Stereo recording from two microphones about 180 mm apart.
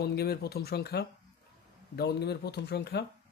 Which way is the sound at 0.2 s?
60° left (ahead or behind).